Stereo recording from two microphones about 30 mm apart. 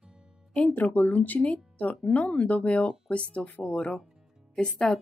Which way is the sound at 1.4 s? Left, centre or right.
Left.